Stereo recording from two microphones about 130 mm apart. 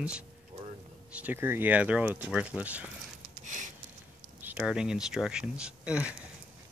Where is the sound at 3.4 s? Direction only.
80° right.